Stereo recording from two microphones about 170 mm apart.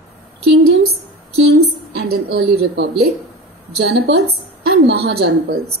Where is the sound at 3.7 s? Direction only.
75° right (ahead or behind).